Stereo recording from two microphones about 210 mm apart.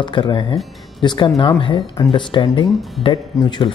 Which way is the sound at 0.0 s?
20° left (ahead or behind).